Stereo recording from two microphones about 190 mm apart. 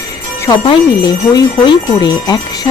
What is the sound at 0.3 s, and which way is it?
Speech, 20° left (ahead or behind).